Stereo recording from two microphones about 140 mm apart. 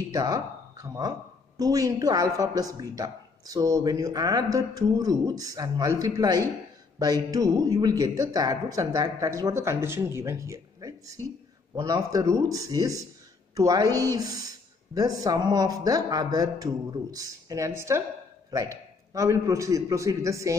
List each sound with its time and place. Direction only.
0.1 s speech: 25° right (ahead or behind)